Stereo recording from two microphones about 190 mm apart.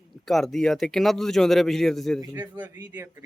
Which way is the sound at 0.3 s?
Centre (ahead or behind).